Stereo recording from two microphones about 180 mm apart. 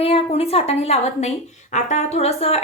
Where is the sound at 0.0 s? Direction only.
35° left (ahead or behind).